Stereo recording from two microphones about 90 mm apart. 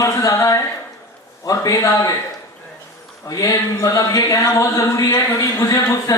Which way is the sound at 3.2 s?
40° left (ahead or behind).